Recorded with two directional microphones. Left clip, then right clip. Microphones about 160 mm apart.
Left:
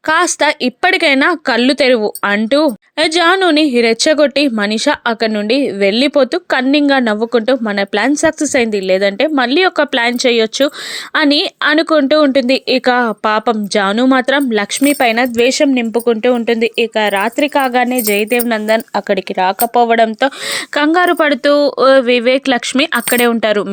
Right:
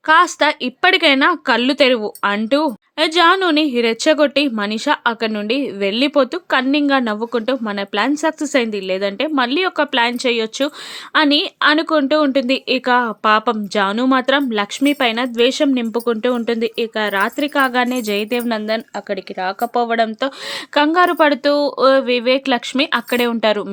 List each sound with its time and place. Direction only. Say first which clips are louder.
0.1 s speech: left 1 dB; 35° left (ahead or behind)
17.8 s speech: left 6 dB; 10° left (ahead or behind)
18.9 s speech: left 9 dB; 40° left (ahead or behind)